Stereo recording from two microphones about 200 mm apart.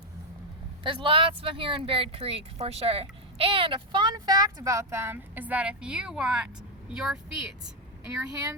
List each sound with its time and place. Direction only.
0.9 s speech: 25° right (ahead or behind); by 7.7 s centre (ahead or behind)
8.3 s speech: 20° right (ahead or behind)